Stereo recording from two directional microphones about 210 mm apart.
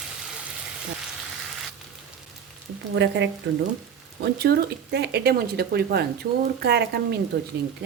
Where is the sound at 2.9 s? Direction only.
55° right (ahead or behind).